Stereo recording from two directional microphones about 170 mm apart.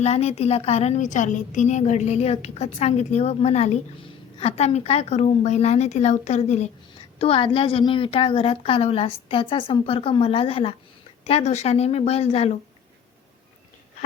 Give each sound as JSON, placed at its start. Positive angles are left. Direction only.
{"t": 0.0, "sound": "a woman's voice", "side_deg": 40}